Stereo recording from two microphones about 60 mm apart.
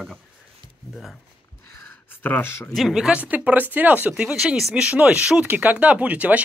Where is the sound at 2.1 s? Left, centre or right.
Left.